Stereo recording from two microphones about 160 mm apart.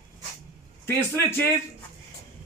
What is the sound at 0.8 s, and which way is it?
Speech, 15° left (ahead or behind).